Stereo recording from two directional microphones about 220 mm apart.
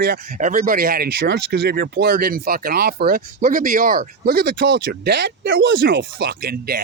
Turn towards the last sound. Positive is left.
turn(degrees=-45)  # may be behind; listen again after turning